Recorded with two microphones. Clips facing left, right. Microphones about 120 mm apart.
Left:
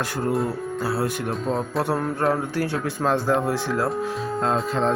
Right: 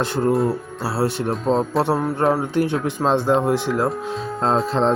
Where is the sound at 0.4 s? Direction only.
30° right (ahead or behind).